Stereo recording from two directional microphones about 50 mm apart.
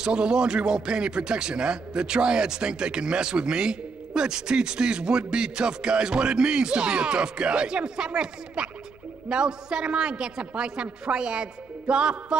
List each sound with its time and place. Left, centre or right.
0.0 s a man's voice: centre
11.9 s music: centre